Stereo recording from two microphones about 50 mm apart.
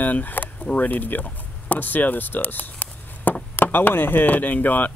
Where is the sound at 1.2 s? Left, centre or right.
Left.